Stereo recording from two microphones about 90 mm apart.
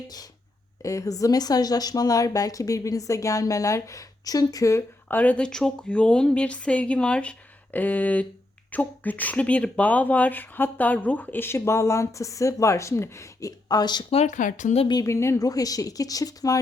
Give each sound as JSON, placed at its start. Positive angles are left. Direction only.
{"t": 0.8, "sound": "speech", "side_deg": 40}
{"t": 5.0, "sound": "speech", "side_deg": 20}
{"t": 13.7, "sound": "speech", "side_deg": 50}
{"t": 15.0, "sound": "speech", "side_deg": 30}